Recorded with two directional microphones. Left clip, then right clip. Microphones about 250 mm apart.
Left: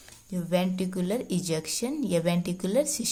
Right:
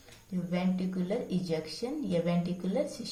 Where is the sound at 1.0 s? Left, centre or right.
Left.